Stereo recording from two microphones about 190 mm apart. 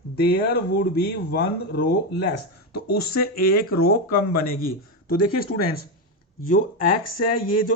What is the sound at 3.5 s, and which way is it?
Speech, 50° left (ahead or behind).